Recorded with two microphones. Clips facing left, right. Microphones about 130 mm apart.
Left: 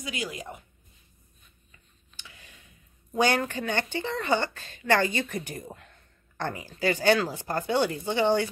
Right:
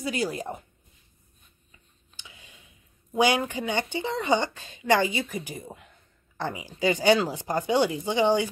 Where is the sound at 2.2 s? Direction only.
15° right (ahead or behind).